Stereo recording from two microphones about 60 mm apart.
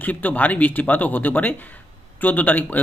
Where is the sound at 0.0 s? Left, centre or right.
Left.